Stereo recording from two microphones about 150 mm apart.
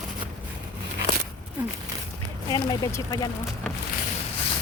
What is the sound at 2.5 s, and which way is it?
Speech, 30° left (ahead or behind).